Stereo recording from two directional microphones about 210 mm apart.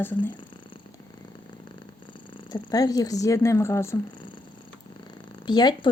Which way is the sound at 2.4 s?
20° left (ahead or behind).